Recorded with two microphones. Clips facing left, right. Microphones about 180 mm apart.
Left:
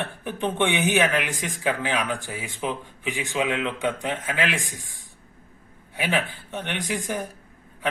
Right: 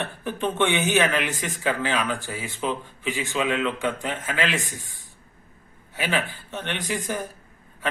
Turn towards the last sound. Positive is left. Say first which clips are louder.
# even
turn(degrees=10)  # may be behind; listen again after turning